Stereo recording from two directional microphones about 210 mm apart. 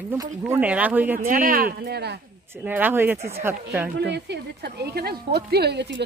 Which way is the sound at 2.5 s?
10° right (ahead or behind).